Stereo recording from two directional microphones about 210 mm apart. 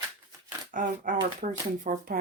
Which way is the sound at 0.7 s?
40° right (ahead or behind).